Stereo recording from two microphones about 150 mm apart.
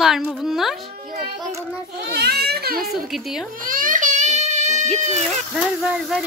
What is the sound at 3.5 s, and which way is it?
Baby cry, 65° right (ahead or behind).